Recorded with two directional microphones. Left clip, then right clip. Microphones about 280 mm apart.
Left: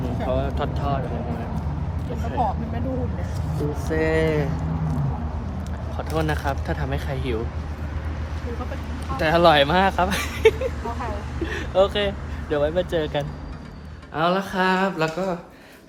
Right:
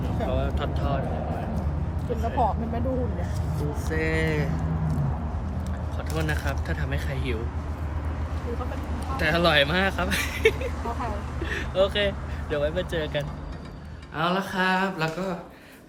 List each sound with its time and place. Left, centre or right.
0.3 s vehicle: centre
2.4 s speech: right
3.9 s speech: centre
6.1 s speech: centre
9.1 s speech: centre
14.2 s speech: centre